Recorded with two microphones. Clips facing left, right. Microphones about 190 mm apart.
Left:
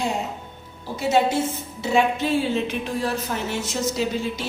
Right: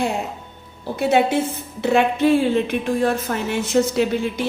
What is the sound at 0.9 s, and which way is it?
A woman's voice, 60° right (ahead or behind).